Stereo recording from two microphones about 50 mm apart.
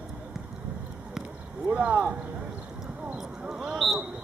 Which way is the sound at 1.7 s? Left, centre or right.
Right.